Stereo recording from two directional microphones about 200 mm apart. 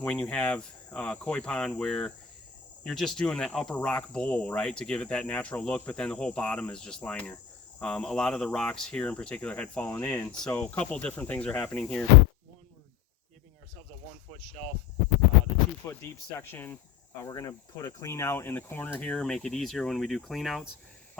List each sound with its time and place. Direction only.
0.0 s speech: 5° left (ahead or behind)
15.9 s speech: 10° left (ahead or behind)